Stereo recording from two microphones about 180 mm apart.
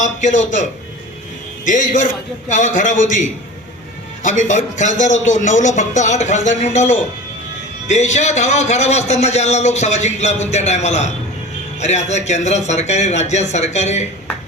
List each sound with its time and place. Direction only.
0.0 s a man's voice: 45° left (ahead or behind)